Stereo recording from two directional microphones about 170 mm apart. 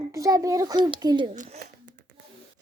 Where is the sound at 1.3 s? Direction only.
45° right (ahead or behind).